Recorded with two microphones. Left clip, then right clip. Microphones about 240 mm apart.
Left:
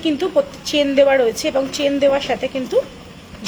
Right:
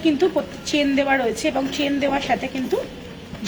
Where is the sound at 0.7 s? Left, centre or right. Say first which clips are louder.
Left 5 dB; left.